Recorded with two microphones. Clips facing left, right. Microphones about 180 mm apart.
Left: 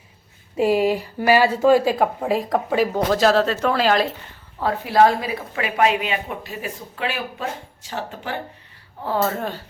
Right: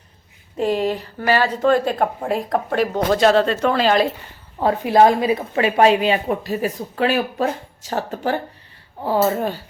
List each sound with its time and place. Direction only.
0.5 s speech: 10° left (ahead or behind)
4.6 s speech: 20° right (ahead or behind); by 8.4 s 40° right (ahead or behind)
9.0 s speech: 15° right (ahead or behind)